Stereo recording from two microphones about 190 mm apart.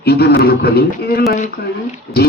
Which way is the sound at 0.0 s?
55° left (ahead or behind).